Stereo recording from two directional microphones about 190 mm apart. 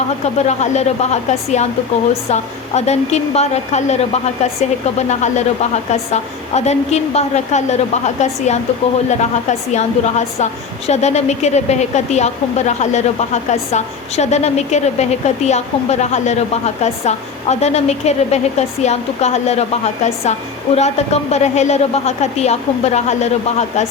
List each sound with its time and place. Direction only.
0.3 s a woman's voice: 35° left (ahead or behind)